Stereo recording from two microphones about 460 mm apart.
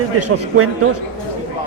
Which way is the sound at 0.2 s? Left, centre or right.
Right.